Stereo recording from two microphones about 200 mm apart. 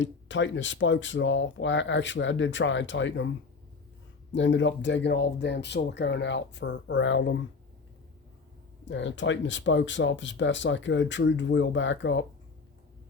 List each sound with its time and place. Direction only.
0.0 s speech: 65° left (ahead or behind)
4.3 s speech: 65° left (ahead or behind)
8.9 s speech: 65° left (ahead or behind)